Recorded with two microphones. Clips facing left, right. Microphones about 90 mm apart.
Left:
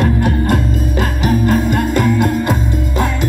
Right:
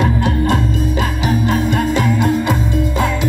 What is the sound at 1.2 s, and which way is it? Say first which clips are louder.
Music: left 3 dB; 50° left (ahead or behind).